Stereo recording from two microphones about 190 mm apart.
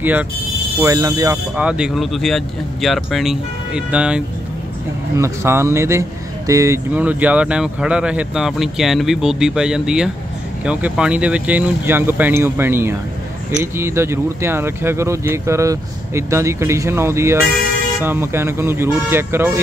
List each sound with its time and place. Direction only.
0.0 s speech: 10° right (ahead or behind)
0.7 s speech: 20° right (ahead or behind)
1.6 s speech: 5° right (ahead or behind)